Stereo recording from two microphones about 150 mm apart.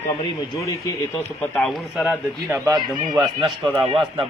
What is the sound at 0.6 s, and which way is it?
Speech, 20° left (ahead or behind).